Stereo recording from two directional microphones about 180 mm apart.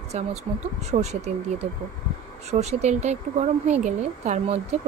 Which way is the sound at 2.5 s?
40° right (ahead or behind).